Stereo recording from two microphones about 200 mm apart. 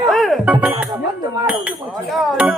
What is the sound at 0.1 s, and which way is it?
Music, centre (ahead or behind).